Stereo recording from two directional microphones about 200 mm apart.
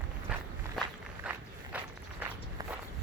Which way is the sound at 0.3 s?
5° right (ahead or behind).